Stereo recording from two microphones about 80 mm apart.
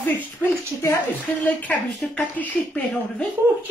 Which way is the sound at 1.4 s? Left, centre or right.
Centre.